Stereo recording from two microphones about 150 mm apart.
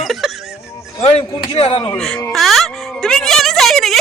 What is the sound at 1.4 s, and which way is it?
Speech, 40° left (ahead or behind).